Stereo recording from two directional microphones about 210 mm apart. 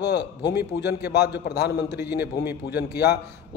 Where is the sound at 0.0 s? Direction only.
55° left (ahead or behind).